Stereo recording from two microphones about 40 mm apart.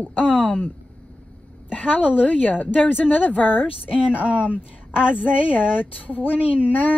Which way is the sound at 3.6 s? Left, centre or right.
Right.